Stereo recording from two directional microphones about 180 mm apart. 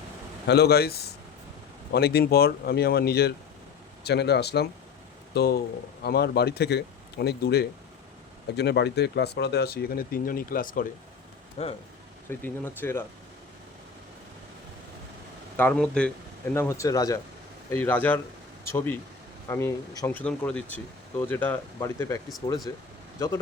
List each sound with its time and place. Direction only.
0.4 s speech: 65° left (ahead or behind)
11.6 s speech: 35° left (ahead or behind)
12.3 s speech: 10° left (ahead or behind)
15.5 s speech: 10° left (ahead or behind)
16.6 s speech: 15° left (ahead or behind)